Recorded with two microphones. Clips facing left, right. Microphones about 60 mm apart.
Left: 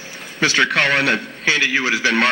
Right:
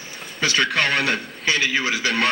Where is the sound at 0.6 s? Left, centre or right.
Left.